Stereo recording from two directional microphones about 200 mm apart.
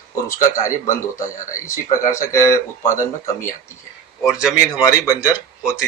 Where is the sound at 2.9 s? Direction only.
40° left (ahead or behind).